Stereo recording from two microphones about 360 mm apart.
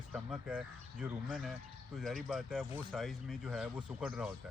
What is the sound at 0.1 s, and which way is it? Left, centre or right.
Speech, centre.